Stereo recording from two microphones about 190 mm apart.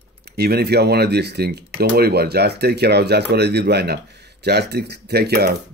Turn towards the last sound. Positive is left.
turn(degrees=-55)  # may be behind; listen again after turning